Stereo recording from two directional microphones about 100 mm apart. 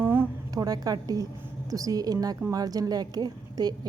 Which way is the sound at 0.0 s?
20° right (ahead or behind).